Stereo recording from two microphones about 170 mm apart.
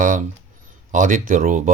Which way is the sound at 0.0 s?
50° right (ahead or behind).